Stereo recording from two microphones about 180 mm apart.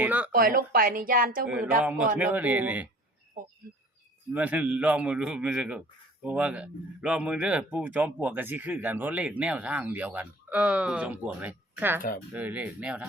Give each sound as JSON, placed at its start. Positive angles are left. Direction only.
{"t": 0.0, "sound": "speech", "side_deg": -10}
{"t": 0.3, "sound": "a woman's voice", "side_deg": -50}
{"t": 1.5, "sound": "speech", "side_deg": -10}
{"t": 4.3, "sound": "speech", "side_deg": -10}